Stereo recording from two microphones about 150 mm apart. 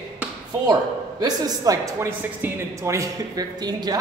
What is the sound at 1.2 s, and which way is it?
A man's voice, 25° right (ahead or behind).